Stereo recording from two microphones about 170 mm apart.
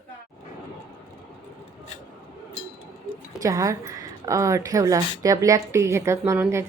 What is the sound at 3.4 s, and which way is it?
A woman's voice, 20° right (ahead or behind).